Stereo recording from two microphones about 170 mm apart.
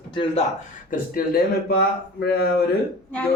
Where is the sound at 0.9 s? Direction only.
65° left (ahead or behind).